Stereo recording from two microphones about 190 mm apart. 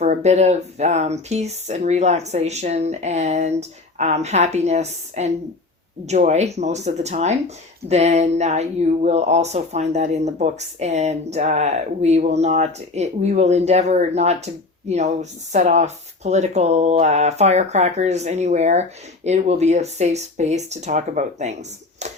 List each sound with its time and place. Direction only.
0.0 s speech: 35° right (ahead or behind)